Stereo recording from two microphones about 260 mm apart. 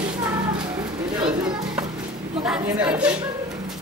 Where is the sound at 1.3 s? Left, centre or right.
Centre.